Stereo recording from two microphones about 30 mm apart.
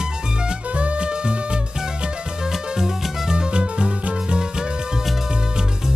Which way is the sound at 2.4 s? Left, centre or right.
Centre.